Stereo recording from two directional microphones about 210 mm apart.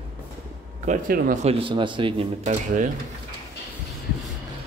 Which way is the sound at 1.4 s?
25° right (ahead or behind).